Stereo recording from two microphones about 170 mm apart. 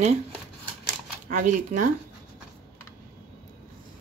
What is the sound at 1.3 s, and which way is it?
Speech, 50° right (ahead or behind).